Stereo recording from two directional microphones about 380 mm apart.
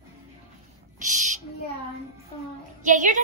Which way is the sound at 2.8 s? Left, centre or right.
Centre.